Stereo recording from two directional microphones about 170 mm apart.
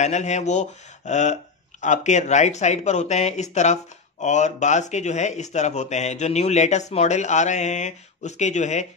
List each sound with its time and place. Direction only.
0.0 s speech: 45° left (ahead or behind)